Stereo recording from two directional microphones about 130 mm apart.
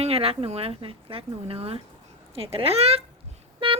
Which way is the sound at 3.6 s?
40° right (ahead or behind).